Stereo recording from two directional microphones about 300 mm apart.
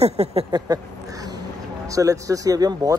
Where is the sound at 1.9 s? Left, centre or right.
Centre.